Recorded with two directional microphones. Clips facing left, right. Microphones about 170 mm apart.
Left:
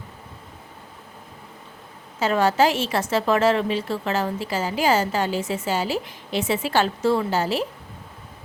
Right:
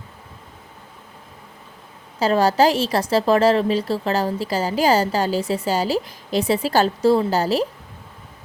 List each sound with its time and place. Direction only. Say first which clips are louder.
2.1 s a woman's voice: right 3 dB; 35° right (ahead or behind)